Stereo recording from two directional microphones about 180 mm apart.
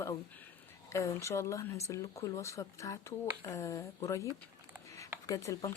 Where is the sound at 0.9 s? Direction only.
15° left (ahead or behind).